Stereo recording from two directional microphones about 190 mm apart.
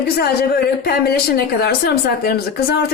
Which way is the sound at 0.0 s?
55° left (ahead or behind).